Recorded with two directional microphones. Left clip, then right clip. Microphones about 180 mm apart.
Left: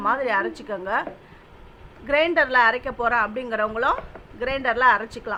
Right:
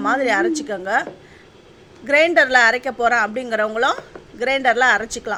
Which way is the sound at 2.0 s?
20° right (ahead or behind).